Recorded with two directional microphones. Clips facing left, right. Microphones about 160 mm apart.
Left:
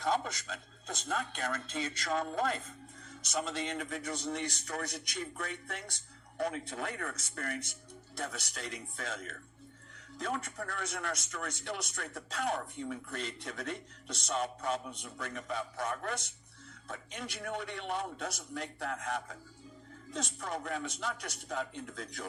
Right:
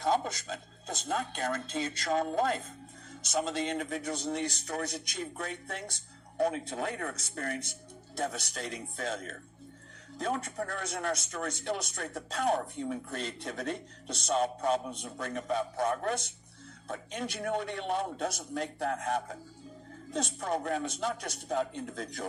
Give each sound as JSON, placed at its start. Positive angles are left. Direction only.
{"t": 0.0, "sound": "speech", "side_deg": -30}